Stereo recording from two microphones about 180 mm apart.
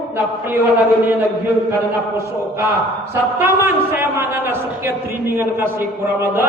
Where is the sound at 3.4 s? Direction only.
10° right (ahead or behind).